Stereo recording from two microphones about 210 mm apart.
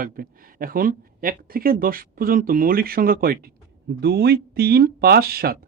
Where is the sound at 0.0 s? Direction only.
40° right (ahead or behind).